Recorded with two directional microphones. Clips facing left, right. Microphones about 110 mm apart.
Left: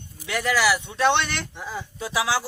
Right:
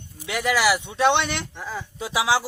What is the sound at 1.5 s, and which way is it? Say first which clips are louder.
Speech: right 1 dB; 5° left (ahead or behind).